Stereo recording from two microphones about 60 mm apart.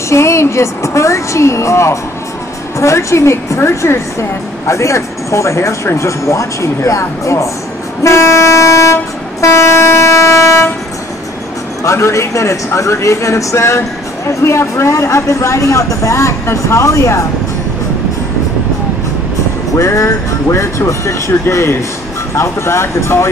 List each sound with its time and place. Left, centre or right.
0.1 s speech: left
8.0 s train: left
11.8 s speech: left
19.8 s speech: left